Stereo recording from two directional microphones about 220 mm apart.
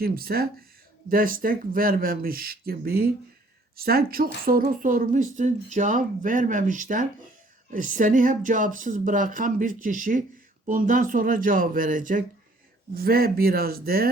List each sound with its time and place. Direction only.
0.0 s speech: 45° right (ahead or behind)